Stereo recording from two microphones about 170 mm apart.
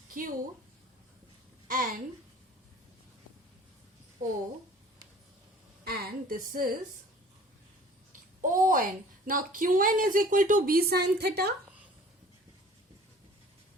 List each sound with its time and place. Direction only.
0.1 s a woman's voice: 55° right (ahead or behind)
1.6 s a woman's voice: 55° right (ahead or behind)
5.8 s a woman's voice: 60° right (ahead or behind)
8.4 s a woman's voice: 50° right (ahead or behind); by 11.5 s 75° right (ahead or behind)